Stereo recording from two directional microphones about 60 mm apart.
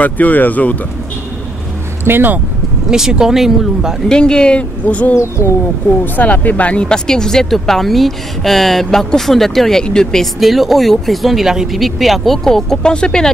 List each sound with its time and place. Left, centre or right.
0.0 s speech: left
2.0 s speech: right
2.9 s speech: centre
4.1 s speech: centre
4.8 s speech: left
5.1 s speech: left
6.1 s speech: left
10.4 s speech: centre